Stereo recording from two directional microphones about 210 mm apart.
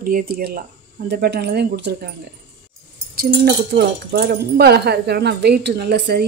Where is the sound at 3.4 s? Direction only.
50° right (ahead or behind).